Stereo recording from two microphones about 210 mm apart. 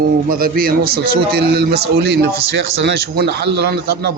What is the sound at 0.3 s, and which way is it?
Speech, 45° right (ahead or behind).